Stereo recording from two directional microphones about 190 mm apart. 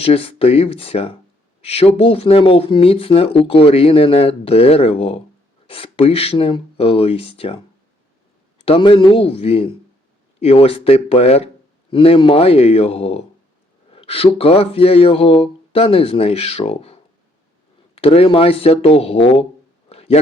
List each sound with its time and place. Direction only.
0.0 s speech: 30° left (ahead or behind)
8.6 s a man's voice: 30° left (ahead or behind)
19.9 s a sound: 30° left (ahead or behind)